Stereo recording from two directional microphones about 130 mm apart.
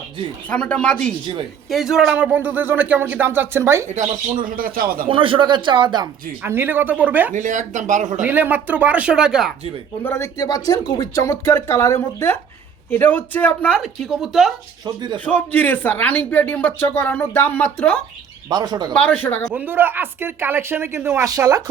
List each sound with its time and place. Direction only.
0.5 s speech: 10° left (ahead or behind); by 3.8 s 20° right (ahead or behind)
3.9 s speech: 80° right
5.0 s speech: 40° right (ahead or behind)
6.4 s speech: 15° right (ahead or behind)
7.3 s speech: 75° right (ahead or behind)
8.2 s speech: 15° right (ahead or behind)
10.0 s speech: 20° left (ahead or behind); by 14.5 s centre (ahead or behind)
14.8 s speech: 35° right (ahead or behind)
15.2 s speech: 10° left (ahead or behind)
18.4 s speech: 30° right (ahead or behind)
18.9 s speech: 15° left (ahead or behind)
19.5 s speech: 15° right (ahead or behind)